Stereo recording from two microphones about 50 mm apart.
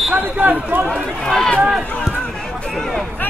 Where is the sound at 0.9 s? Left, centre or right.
Centre.